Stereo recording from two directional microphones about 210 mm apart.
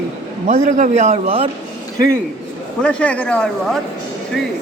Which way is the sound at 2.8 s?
5° left (ahead or behind).